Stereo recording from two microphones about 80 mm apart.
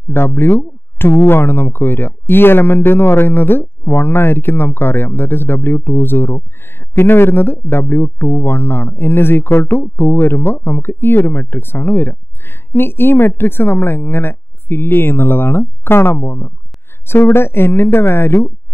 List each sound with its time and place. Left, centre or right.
0.1 s speech: left